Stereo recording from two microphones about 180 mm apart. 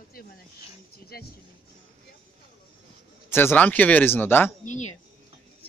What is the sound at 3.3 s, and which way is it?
Speech, 10° left (ahead or behind).